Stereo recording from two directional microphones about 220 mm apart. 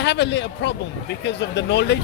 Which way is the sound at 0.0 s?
50° left (ahead or behind).